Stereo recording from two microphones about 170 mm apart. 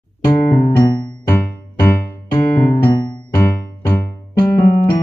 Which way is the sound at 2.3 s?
15° left (ahead or behind).